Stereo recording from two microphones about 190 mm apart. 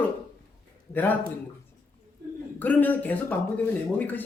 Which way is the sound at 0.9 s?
10° left (ahead or behind).